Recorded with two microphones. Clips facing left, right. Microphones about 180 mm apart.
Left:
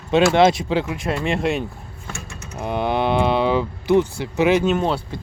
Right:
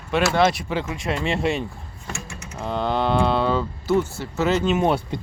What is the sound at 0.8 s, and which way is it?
Speech, centre (ahead or behind).